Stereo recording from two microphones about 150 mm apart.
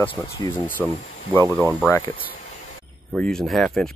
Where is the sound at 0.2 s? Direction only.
15° left (ahead or behind).